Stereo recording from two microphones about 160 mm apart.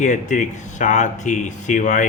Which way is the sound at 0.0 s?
50° left (ahead or behind).